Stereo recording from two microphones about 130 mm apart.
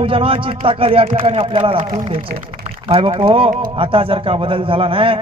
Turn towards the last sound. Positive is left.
turn(degrees=-45)  # may be behind; listen again after turning